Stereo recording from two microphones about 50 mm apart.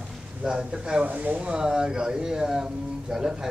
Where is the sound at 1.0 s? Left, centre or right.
Right.